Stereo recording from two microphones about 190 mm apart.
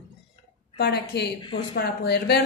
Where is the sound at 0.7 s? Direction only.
60° left (ahead or behind).